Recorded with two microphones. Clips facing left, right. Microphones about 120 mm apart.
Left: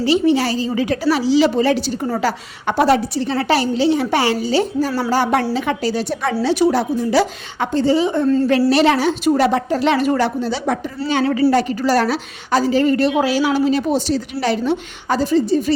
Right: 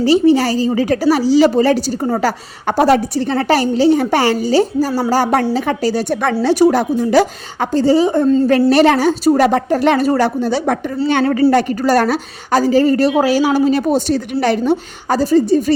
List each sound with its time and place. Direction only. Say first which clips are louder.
0.0 s a woman's voice: right 4 dB; 40° right (ahead or behind)